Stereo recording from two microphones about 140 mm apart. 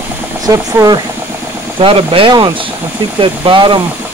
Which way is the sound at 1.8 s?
40° right (ahead or behind).